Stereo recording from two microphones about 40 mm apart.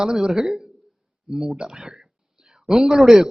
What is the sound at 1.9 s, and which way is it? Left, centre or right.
Whispering, centre.